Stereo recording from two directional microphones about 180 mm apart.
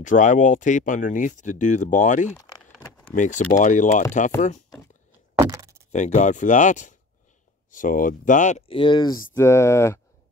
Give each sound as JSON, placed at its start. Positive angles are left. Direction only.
{"t": 0.0, "sound": "speech", "side_deg": 45}
{"t": 2.3, "sound": "speech", "side_deg": 20}
{"t": 3.2, "sound": "speech", "side_deg": 45}
{"t": 5.4, "sound": "a sound", "side_deg": -20}
{"t": 5.9, "sound": "speech", "side_deg": 40}